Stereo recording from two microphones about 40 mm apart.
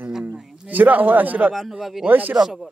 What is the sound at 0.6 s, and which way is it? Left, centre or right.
Speech, right.